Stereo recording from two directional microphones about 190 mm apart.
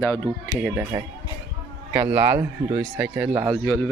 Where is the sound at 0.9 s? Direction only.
20° right (ahead or behind).